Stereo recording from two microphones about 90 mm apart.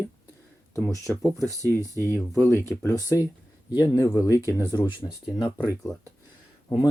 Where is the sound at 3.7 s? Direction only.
45° left (ahead or behind).